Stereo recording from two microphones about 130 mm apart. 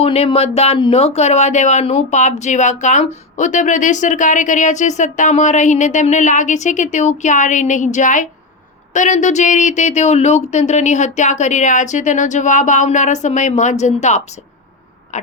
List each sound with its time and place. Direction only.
0.0 s a sound: 50° left (ahead or behind)
0.8 s speech: 50° left (ahead or behind)
15.1 s owl: 65° left (ahead or behind)